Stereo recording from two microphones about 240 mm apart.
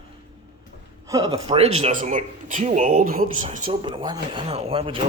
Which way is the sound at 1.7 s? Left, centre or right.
Right.